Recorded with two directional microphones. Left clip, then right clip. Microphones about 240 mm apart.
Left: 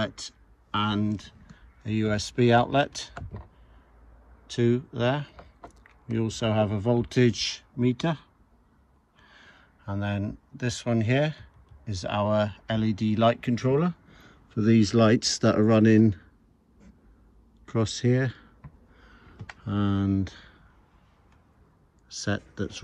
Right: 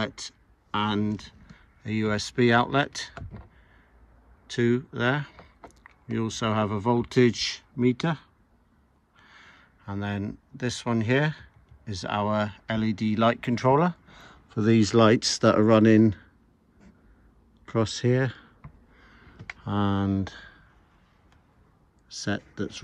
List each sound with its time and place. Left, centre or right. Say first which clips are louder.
0.0 s speech: even; centre
4.5 s speech: even; centre
17.6 s speech: right 1 dB; centre
18.9 s a sound: even; centre
19.6 s speech: right 2 dB; centre
22.1 s speech: even; centre